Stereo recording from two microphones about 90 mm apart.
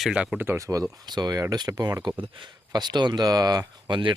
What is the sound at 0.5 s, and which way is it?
Speech, 40° right (ahead or behind).